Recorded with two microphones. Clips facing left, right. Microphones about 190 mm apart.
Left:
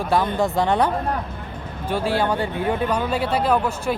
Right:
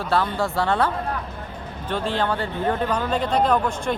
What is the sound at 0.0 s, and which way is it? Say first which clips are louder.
Speech: left 2 dB; 15° left (ahead or behind).